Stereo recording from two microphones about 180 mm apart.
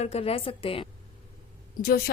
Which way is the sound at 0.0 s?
35° left (ahead or behind).